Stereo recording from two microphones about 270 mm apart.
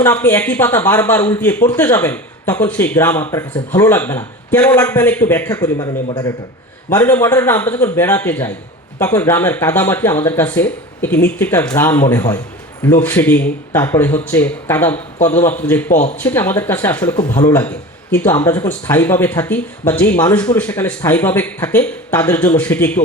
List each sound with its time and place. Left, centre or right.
0.0 s a man's voice: centre
15.9 s speech: left
16.2 s a man's voice: centre